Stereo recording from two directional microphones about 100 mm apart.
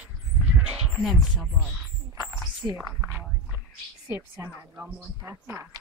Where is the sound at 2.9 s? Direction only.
25° right (ahead or behind).